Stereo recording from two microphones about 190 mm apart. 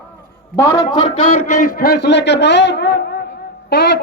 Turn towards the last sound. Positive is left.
turn(degrees=60)  # may be behind; listen again after turning